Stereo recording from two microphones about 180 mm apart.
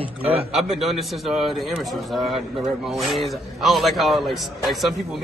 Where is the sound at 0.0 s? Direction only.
30° right (ahead or behind).